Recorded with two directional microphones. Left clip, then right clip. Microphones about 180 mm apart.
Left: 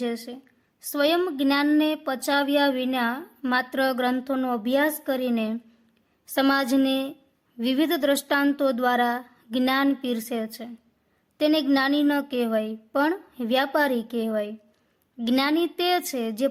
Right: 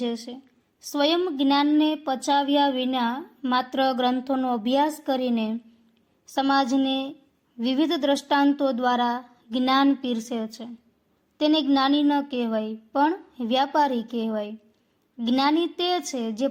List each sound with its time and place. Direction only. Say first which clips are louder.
0.0 s speech: even; 15° left (ahead or behind)
6.2 s a child's voice: even; 25° left (ahead or behind)